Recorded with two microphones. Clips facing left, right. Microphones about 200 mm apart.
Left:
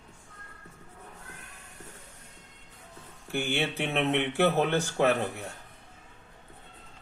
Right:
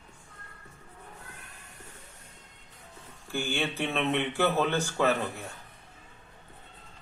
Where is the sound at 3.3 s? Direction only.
20° left (ahead or behind).